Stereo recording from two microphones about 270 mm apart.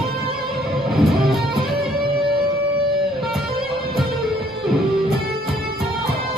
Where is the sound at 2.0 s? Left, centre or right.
Centre.